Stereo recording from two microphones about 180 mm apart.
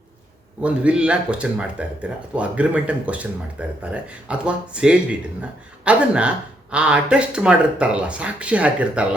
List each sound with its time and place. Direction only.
0.6 s speech: 5° right (ahead or behind)